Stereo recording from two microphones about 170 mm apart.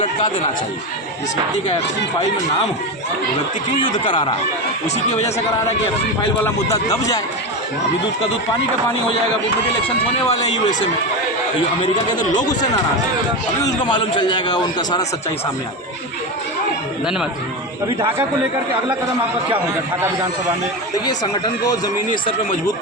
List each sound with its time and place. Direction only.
3.8 s a man's voice: 25° left (ahead or behind)
6.4 s a man's voice: 20° left (ahead or behind)
10.2 s speech: 45° left (ahead or behind)
12.2 s speech: 45° left (ahead or behind)
13.8 s a man's voice: 25° left (ahead or behind)